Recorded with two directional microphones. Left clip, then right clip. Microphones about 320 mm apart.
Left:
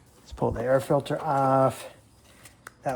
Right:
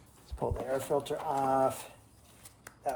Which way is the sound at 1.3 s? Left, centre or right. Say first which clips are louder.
Left 7 dB; left.